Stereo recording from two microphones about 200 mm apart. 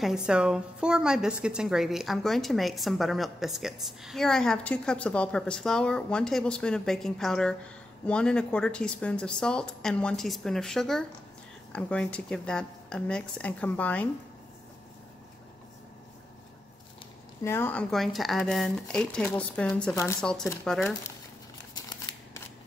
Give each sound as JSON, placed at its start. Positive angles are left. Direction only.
{"t": 0.0, "sound": "a woman's voice", "side_deg": -5}
{"t": 17.4, "sound": "a woman's voice", "side_deg": 10}
{"t": 21.7, "sound": "scissors", "side_deg": 20}